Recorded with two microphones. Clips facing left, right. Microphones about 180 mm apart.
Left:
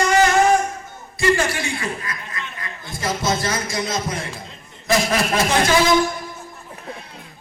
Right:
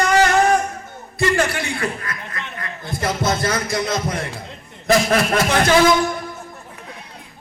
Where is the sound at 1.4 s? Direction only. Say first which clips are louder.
Right 2 dB; 55° right (ahead or behind).